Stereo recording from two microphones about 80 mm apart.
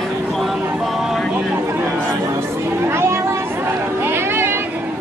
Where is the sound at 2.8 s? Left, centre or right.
Right.